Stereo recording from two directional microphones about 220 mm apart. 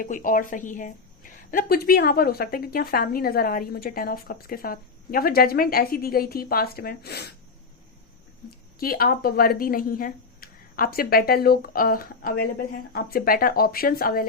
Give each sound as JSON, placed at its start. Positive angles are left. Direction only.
{"t": 0.0, "sound": "a woman's voice", "side_deg": 40}
{"t": 8.4, "sound": "a woman's voice", "side_deg": 45}